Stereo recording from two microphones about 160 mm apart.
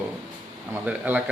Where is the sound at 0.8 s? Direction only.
10° right (ahead or behind).